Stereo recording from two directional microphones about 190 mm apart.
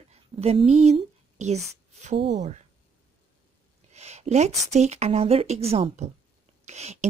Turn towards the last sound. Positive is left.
turn(degrees=-35)  # may be behind; listen again after turning